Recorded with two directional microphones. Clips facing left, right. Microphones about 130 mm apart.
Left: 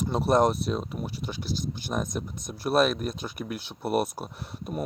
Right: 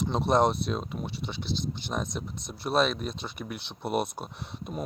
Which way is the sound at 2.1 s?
50° left (ahead or behind).